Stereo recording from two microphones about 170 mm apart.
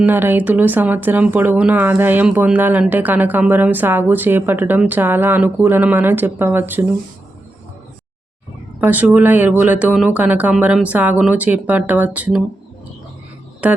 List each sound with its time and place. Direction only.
0.0 s speech: 10° right (ahead or behind)
8.8 s speech: 10° right (ahead or behind)
13.6 s speech: 5° right (ahead or behind)